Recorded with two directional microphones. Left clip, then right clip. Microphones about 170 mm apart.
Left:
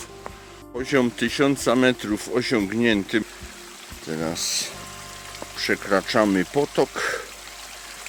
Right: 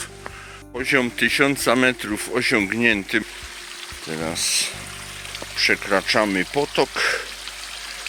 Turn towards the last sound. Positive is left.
turn(degrees=25)  # may be behind; listen again after turning